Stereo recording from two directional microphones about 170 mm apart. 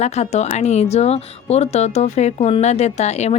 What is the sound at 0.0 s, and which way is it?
Speech, 40° left (ahead or behind).